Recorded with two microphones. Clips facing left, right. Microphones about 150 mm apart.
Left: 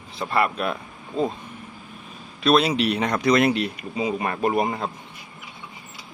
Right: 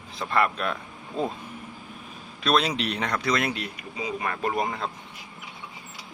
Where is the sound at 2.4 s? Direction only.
5° left (ahead or behind).